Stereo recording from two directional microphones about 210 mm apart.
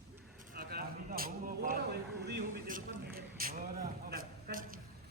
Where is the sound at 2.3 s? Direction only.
45° right (ahead or behind).